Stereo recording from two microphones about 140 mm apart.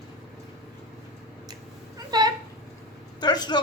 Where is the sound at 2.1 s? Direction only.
30° right (ahead or behind).